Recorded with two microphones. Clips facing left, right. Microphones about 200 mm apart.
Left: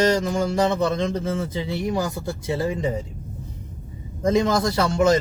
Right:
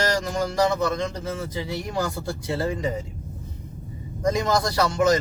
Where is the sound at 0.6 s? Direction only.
25° left (ahead or behind).